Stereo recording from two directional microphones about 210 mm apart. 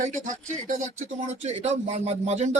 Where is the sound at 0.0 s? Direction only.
35° right (ahead or behind).